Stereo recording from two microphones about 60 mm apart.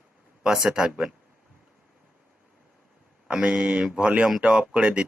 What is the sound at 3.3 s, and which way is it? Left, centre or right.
Speech, centre.